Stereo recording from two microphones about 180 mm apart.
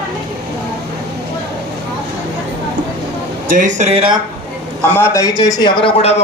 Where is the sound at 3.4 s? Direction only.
45° right (ahead or behind).